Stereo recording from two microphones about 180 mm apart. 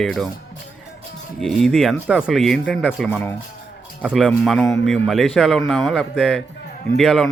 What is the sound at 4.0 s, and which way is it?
Speech, 5° right (ahead or behind).